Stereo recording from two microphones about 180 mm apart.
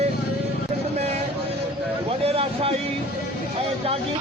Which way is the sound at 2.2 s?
35° right (ahead or behind).